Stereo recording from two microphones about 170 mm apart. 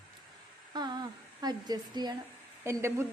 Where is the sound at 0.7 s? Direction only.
25° right (ahead or behind).